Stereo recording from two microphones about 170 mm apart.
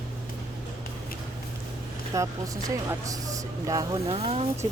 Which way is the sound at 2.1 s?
20° right (ahead or behind).